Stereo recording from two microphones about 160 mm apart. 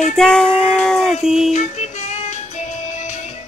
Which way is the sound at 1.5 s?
45° left (ahead or behind).